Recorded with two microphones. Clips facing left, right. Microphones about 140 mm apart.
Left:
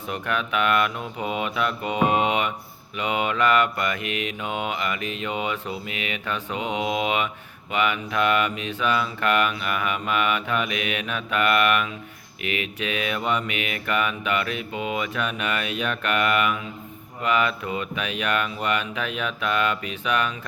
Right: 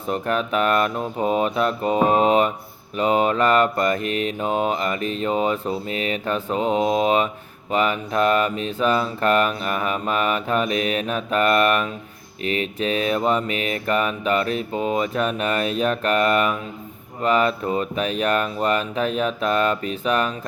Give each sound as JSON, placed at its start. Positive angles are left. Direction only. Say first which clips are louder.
{"t": 0.1, "sound": "mantra", "louder": "right 5 dB", "side_deg": -35}